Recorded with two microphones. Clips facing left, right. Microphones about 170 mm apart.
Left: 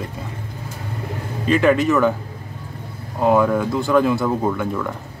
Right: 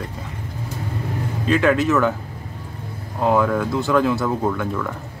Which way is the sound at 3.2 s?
5° left (ahead or behind).